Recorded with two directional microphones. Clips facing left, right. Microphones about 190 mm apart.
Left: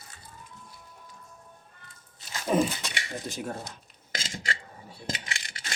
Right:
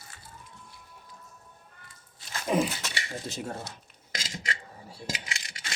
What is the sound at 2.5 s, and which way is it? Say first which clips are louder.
Dog: left 2 dB; 10° right (ahead or behind).